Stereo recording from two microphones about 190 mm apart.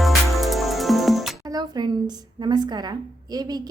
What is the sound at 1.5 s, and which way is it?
A woman's voice, 20° right (ahead or behind).